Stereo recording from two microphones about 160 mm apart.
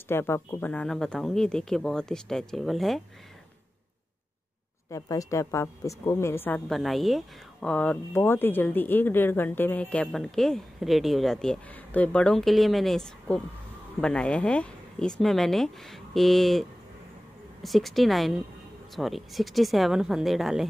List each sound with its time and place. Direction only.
0.1 s speech: 15° left (ahead or behind); by 3.0 s centre (ahead or behind)
4.9 s speech: 20° left (ahead or behind)
6.7 s speech: centre (ahead or behind)